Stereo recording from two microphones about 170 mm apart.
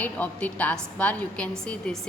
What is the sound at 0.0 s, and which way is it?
A woman's voice, 10° left (ahead or behind).